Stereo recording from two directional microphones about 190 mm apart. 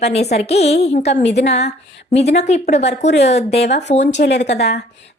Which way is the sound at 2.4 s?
35° left (ahead or behind).